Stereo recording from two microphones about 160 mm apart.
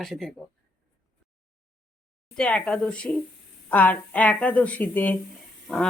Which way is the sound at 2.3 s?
5° left (ahead or behind).